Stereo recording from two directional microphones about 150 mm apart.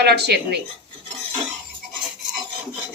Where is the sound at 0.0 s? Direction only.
90° right.